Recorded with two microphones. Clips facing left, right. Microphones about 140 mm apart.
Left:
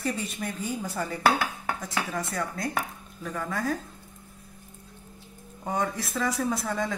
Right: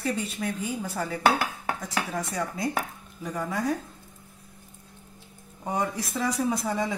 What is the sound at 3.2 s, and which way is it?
Speech, 15° right (ahead or behind).